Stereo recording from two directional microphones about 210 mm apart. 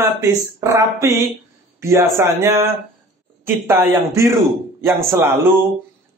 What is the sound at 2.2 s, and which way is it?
Speech, 15° right (ahead or behind).